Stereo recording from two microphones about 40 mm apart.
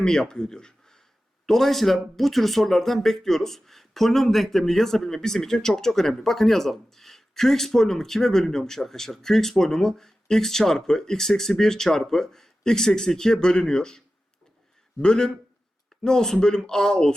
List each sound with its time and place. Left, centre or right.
0.0 s speech: centre
1.5 s speech: centre
15.0 s a man's voice: centre